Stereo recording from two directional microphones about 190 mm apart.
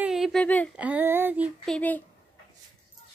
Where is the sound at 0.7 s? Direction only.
10° right (ahead or behind).